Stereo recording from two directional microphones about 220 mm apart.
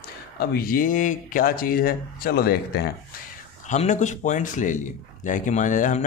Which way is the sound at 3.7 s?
35° left (ahead or behind).